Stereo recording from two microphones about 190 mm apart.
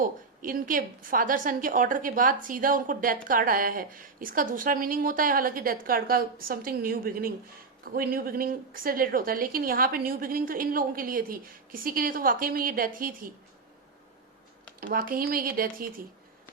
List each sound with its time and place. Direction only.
0.0 s a woman's voice: 45° right (ahead or behind)
14.8 s a woman's voice: 50° right (ahead or behind)